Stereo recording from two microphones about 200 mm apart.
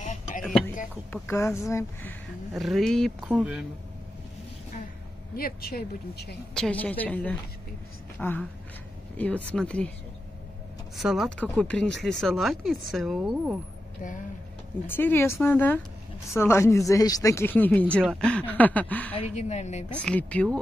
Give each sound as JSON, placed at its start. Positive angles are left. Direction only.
{"t": 0.0, "sound": "music", "side_deg": 40}
{"t": 0.4, "sound": "music", "side_deg": 0}
{"t": 1.1, "sound": "speech", "side_deg": 15}
{"t": 2.5, "sound": "speech", "side_deg": 0}
{"t": 5.3, "sound": "speech", "side_deg": 50}
{"t": 6.5, "sound": "speech", "side_deg": 5}
{"t": 11.0, "sound": "speech", "side_deg": 0}
{"t": 14.9, "sound": "speech", "side_deg": 10}
{"t": 19.1, "sound": "speech", "side_deg": 35}
{"t": 19.9, "sound": "speech", "side_deg": 5}